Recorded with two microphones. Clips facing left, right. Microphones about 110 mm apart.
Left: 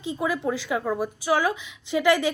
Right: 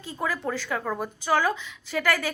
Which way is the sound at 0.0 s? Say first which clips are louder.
Left 4 dB; 15° left (ahead or behind).